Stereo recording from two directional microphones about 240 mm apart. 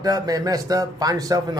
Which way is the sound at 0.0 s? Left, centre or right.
Centre.